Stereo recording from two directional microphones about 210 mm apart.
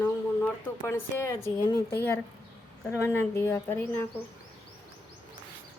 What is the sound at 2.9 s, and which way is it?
Speech, 10° left (ahead or behind).